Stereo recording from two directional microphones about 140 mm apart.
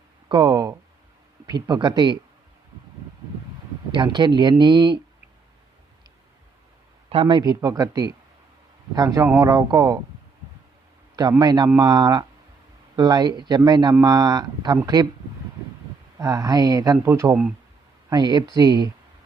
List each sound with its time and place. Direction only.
0.3 s speech: 30° right (ahead or behind)
3.9 s speech: 35° right (ahead or behind)
7.1 s speech: 40° right (ahead or behind)
11.2 s speech: 30° right (ahead or behind)
16.1 s speech: 25° right (ahead or behind)
18.1 s speech: 30° right (ahead or behind)